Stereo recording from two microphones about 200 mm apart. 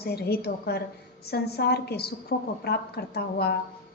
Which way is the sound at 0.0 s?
55° left (ahead or behind).